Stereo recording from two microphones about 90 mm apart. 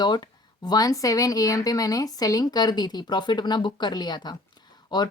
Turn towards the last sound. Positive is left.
turn(degrees=55)  # may be behind; listen again after turning